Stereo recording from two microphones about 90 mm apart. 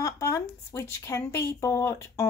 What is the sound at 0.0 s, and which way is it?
Speech, 35° left (ahead or behind).